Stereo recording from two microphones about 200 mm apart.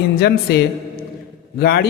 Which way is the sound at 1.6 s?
50° left (ahead or behind).